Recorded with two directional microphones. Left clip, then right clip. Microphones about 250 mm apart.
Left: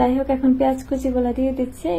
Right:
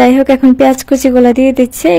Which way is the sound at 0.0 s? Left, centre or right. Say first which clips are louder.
Right 12 dB; right.